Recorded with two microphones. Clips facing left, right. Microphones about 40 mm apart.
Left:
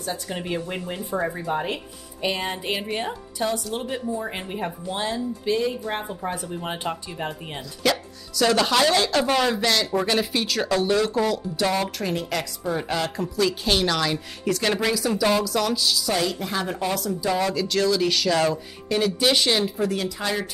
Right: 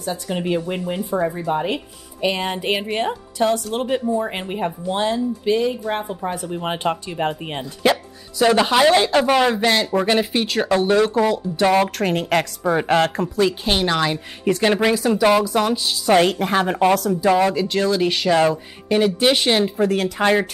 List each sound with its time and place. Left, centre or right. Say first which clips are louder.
0.0 s speech: right 5 dB; right
0.4 s speech: right 6 dB; centre
1.1 s speech: right 4 dB; centre
1.7 s speech: right 5 dB; right
3.3 s speech: right 6 dB; right
4.2 s speech: right 5 dB; right
9.5 s speech: right 4 dB; right
11.9 s speech: right 7 dB; right
13.4 s speech: right 3 dB; right
17.3 s speech: right 6 dB; right